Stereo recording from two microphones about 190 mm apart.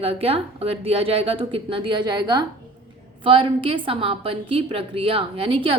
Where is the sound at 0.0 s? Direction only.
30° right (ahead or behind).